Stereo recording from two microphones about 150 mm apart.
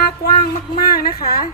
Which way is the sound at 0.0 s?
90° left.